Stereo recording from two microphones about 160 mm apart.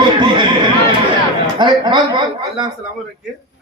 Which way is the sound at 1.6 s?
30° right (ahead or behind).